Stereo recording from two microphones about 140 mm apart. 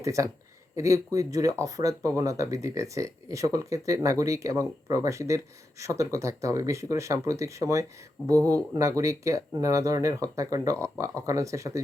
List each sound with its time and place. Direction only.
0.0 s speech: 20° right (ahead or behind)